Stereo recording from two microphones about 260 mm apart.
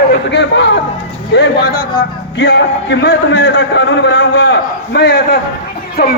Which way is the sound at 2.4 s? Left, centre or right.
Left.